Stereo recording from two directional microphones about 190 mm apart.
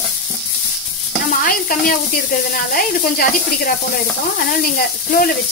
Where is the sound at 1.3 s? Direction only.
50° left (ahead or behind).